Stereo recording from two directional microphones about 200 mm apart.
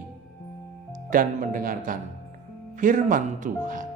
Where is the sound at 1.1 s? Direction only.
45° right (ahead or behind).